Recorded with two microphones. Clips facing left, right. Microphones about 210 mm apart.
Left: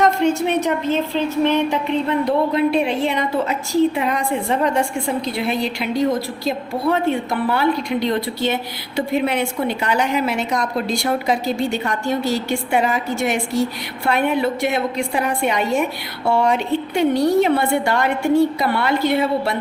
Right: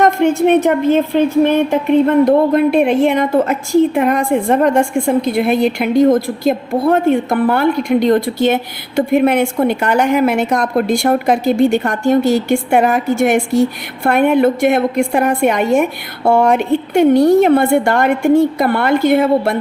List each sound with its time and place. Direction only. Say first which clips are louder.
0.0 s a woman's voice: right 5 dB; 55° right (ahead or behind)